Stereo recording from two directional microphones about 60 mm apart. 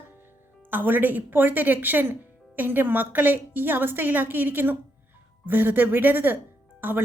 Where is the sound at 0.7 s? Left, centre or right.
Right.